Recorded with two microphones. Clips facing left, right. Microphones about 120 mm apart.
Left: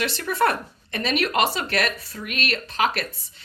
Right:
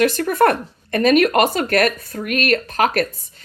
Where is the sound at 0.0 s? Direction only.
45° right (ahead or behind).